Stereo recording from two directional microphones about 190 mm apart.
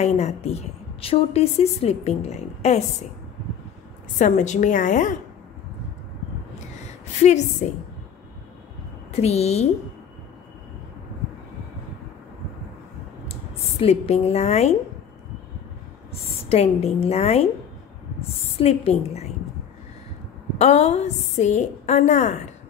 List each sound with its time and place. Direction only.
0.0 s a woman's voice: 35° left (ahead or behind)
4.2 s a woman's voice: 40° left (ahead or behind)
7.6 s a woman's voice: 45° left (ahead or behind)
9.1 s a woman's voice: 35° left (ahead or behind)
13.7 s a woman's voice: 35° left (ahead or behind)
16.1 s speech: 35° left (ahead or behind)
18.6 s a woman's voice: 30° left (ahead or behind)
20.5 s a woman's voice: 35° left (ahead or behind)